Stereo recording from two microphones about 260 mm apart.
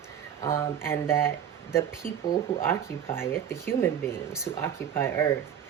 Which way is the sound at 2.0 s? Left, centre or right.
Left.